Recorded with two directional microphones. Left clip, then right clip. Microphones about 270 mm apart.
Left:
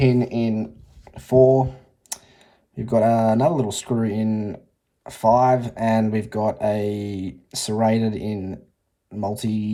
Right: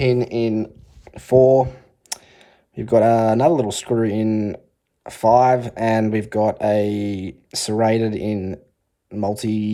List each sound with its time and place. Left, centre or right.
0.0 s speech: right